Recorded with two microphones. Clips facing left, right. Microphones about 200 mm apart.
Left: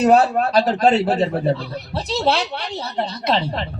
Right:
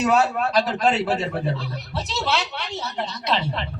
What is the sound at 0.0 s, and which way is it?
A man's voice, 35° left (ahead or behind).